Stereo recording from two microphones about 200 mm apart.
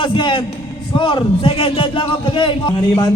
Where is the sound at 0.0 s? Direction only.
25° left (ahead or behind).